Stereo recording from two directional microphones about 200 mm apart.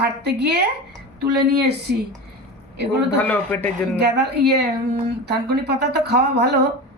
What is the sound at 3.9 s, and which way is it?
Speech, 55° right (ahead or behind).